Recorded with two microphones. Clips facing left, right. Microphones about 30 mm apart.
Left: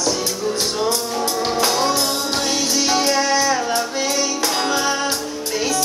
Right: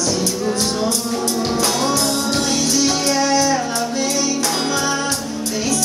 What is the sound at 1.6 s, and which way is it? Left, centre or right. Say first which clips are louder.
Music: left 1 dB; centre.